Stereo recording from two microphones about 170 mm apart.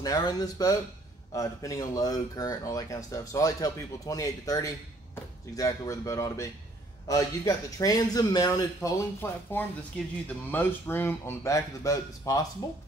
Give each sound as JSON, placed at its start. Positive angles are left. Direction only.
{"t": 0.0, "sound": "speech", "side_deg": 20}